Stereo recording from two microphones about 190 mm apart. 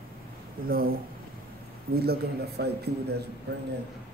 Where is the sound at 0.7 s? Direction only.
50° right (ahead or behind).